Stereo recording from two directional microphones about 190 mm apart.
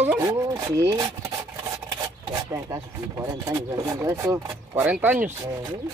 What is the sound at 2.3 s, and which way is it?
Speech, 15° right (ahead or behind).